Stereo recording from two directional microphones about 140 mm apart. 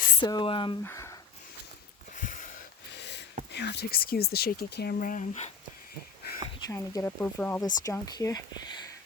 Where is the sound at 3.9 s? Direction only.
90° left; by 5.5 s 60° left (ahead or behind).